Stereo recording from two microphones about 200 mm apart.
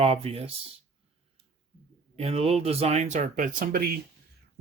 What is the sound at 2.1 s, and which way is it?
Speech, 30° right (ahead or behind).